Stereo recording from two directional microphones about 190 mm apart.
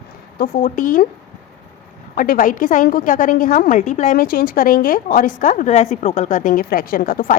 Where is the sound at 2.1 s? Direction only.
50° left (ahead or behind).